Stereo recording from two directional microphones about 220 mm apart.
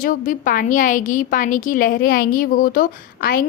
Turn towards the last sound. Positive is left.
turn(degrees=40)  # may be behind; listen again after turning